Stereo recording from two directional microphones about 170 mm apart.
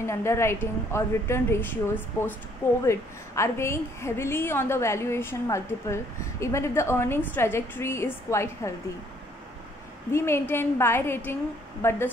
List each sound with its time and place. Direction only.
0.0 s a woman's voice: 15° left (ahead or behind)
10.1 s a woman's voice: 15° left (ahead or behind)